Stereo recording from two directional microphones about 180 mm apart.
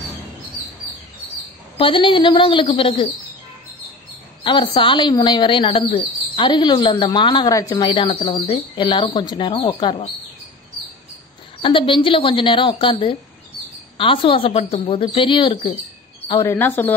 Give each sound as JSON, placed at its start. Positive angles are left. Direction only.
{"t": 1.8, "sound": "speech", "side_deg": 30}
{"t": 4.4, "sound": "speech", "side_deg": 25}
{"t": 11.6, "sound": "speech", "side_deg": 30}
{"t": 13.9, "sound": "speech", "side_deg": 30}
{"t": 16.4, "sound": "speech", "side_deg": 10}